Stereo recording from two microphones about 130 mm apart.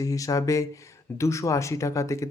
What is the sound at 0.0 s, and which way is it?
Speech, 25° left (ahead or behind).